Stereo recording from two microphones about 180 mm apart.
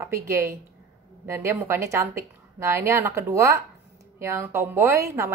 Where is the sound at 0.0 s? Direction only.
15° right (ahead or behind).